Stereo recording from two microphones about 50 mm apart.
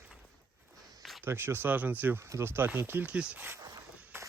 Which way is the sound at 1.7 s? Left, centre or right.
Right.